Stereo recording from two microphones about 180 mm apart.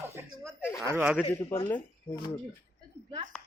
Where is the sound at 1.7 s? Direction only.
25° left (ahead or behind).